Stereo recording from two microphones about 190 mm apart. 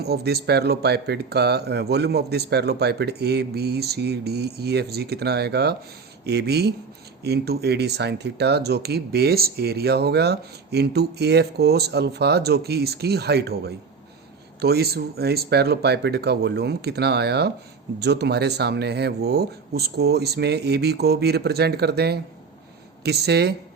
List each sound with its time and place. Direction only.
0.0 s speech: 55° right (ahead or behind)